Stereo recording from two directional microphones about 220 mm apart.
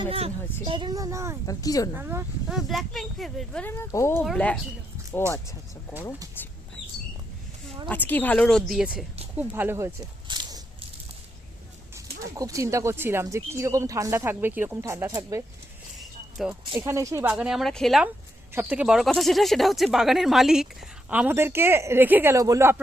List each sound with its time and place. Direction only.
0.0 s speech: 25° right (ahead or behind)
1.5 s speech: 15° left (ahead or behind)
2.0 s speech: 10° right (ahead or behind)
7.9 s speech: 10° left (ahead or behind); by 10.6 s 20° right (ahead or behind)
12.2 s speech: 15° right (ahead or behind)
16.0 s a sound: centre (ahead or behind)
16.7 s speech: 15° right (ahead or behind)
17.3 s speech: centre (ahead or behind)